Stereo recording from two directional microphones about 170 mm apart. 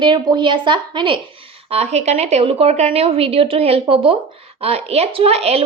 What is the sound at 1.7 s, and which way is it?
A woman's voice, 40° right (ahead or behind).